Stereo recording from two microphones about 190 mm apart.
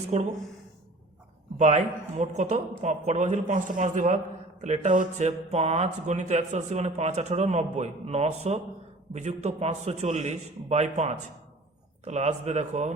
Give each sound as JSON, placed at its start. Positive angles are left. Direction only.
{"t": 0.1, "sound": "speech", "side_deg": -35}
{"t": 1.5, "sound": "speech", "side_deg": -35}